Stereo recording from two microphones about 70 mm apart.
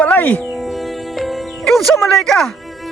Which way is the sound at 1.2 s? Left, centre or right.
Centre.